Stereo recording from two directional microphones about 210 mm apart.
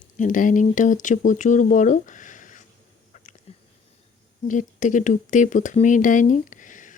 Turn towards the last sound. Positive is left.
turn(degrees=40)  # may be behind; listen again after turning